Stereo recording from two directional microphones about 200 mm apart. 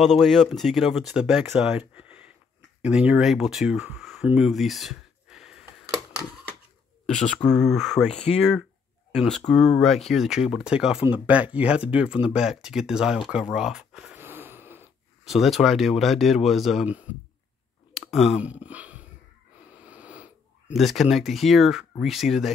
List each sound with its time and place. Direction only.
0.0 s speech: centre (ahead or behind)
7.1 s speech: 5° left (ahead or behind)
8.1 s speech: 30° left (ahead or behind)
8.4 s speech: centre (ahead or behind)
19.6 s a sound: 5° right (ahead or behind)
22.0 s speech: centre (ahead or behind)